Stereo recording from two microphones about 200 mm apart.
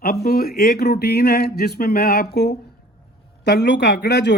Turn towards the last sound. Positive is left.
turn(degrees=55)  # may be behind; listen again after turning